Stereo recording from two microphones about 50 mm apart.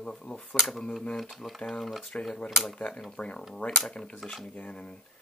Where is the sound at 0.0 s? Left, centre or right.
Centre.